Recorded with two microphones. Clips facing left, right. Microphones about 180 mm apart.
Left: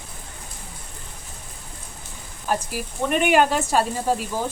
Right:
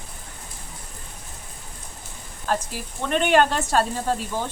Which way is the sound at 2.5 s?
10° left (ahead or behind).